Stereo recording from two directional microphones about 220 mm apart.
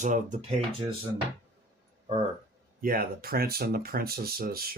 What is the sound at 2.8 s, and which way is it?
Speech, 40° right (ahead or behind).